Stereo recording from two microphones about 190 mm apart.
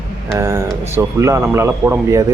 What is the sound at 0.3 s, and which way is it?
A man's voice, 15° right (ahead or behind).